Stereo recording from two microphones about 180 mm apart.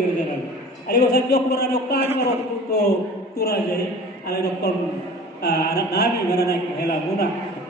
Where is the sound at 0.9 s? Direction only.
55° left (ahead or behind).